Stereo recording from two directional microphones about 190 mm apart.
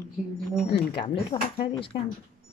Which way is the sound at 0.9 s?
30° left (ahead or behind).